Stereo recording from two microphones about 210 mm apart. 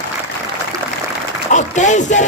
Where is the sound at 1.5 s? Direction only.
35° left (ahead or behind).